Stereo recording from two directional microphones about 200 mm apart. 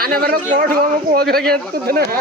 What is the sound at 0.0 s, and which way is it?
Speech, 50° right (ahead or behind).